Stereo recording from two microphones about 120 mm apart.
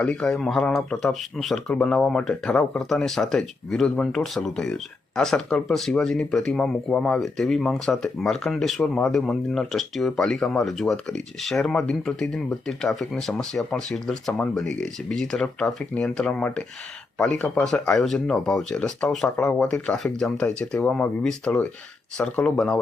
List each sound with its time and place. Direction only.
0.0 s speech: 10° left (ahead or behind)